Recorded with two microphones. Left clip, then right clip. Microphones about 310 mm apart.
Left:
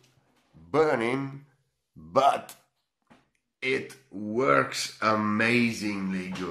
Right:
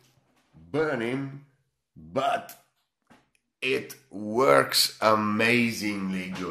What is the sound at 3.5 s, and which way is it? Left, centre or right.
Speech, centre.